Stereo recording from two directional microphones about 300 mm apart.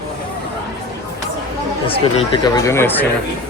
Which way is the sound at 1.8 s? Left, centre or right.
Centre.